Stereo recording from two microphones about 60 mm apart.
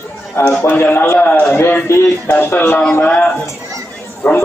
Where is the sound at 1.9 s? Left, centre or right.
Left.